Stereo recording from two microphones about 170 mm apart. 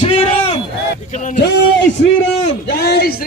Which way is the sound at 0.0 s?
35° left (ahead or behind).